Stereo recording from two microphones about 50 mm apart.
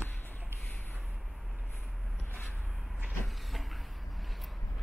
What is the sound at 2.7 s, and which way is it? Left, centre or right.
Cupboard open or close, centre.